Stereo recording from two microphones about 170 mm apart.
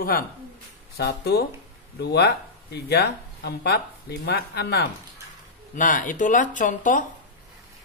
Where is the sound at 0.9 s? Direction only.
70° left (ahead or behind).